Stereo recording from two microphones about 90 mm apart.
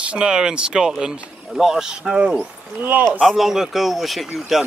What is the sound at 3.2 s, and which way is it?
Speech, centre (ahead or behind).